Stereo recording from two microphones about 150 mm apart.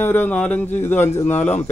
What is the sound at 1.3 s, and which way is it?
Speech, 50° left (ahead or behind).